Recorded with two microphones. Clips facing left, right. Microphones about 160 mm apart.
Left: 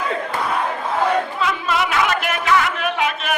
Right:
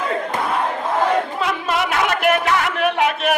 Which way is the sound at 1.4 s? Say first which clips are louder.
Even; 55° right (ahead or behind).